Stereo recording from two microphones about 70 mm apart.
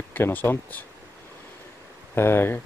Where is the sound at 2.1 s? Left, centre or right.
Left.